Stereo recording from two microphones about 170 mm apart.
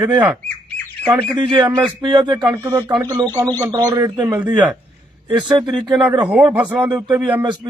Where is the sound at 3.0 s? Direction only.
15° right (ahead or behind).